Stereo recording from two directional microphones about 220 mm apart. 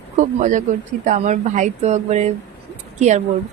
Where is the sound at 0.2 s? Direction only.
35° right (ahead or behind).